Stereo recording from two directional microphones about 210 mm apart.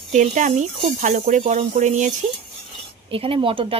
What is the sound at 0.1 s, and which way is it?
Speech, 35° right (ahead or behind).